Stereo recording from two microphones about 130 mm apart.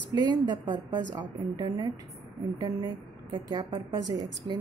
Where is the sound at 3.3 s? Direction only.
35° right (ahead or behind).